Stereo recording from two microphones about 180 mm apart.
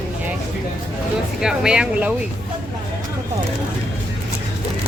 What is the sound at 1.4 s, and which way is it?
Speech, 5° right (ahead or behind).